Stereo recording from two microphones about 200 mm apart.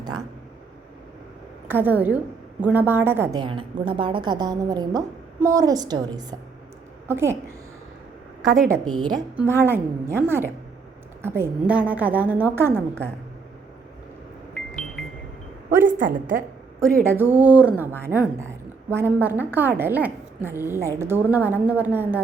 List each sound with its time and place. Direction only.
1.6 s a woman's voice: 10° right (ahead or behind)
3.4 s a woman's voice: 25° right (ahead or behind)
9.0 s a woman's voice: 20° right (ahead or behind)
9.3 s a woman's voice: 10° right (ahead or behind)
14.5 s music: 5° left (ahead or behind)
15.9 s a woman's voice: 40° right (ahead or behind)
16.8 s a woman's voice: 10° right (ahead or behind)